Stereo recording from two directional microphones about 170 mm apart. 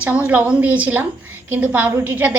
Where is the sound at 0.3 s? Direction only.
10° right (ahead or behind).